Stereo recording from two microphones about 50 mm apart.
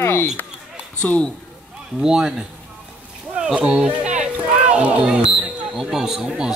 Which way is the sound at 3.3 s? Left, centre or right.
Right.